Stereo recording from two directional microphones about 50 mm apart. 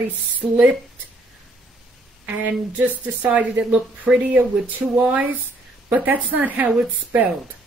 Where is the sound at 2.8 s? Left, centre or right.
Right.